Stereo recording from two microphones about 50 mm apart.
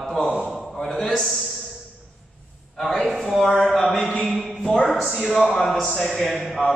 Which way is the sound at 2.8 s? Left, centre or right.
Centre.